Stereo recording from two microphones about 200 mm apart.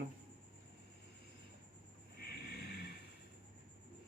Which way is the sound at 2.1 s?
55° left (ahead or behind).